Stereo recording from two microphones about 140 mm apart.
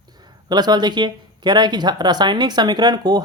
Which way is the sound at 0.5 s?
30° right (ahead or behind).